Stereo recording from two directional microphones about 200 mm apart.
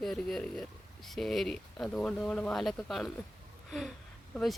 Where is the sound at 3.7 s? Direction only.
Centre (ahead or behind).